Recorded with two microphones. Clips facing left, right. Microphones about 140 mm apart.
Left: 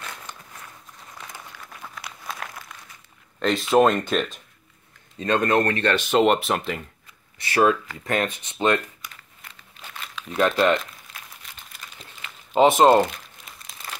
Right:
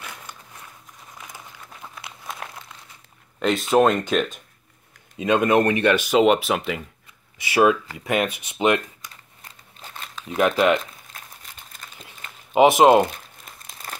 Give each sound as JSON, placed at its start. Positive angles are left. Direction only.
{"t": 0.0, "sound": "walk", "side_deg": -10}
{"t": 1.1, "sound": "a sound", "side_deg": -10}
{"t": 3.3, "sound": "speech", "side_deg": -5}
{"t": 5.1, "sound": "speech", "side_deg": -10}
{"t": 6.0, "sound": "speech", "side_deg": 0}
{"t": 9.1, "sound": "crumpling", "side_deg": -35}
{"t": 10.3, "sound": "speech", "side_deg": -15}
{"t": 11.8, "sound": "crumpling", "side_deg": -45}
{"t": 12.5, "sound": "speech", "side_deg": -10}
{"t": 13.5, "sound": "crumpling", "side_deg": -45}